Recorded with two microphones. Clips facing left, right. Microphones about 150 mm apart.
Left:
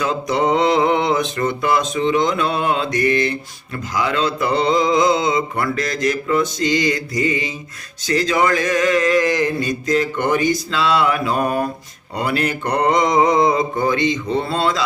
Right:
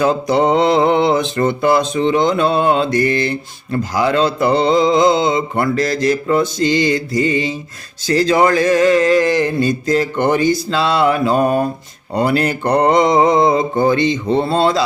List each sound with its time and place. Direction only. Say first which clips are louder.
0.0 s mantra: right 5 dB; 35° right (ahead or behind)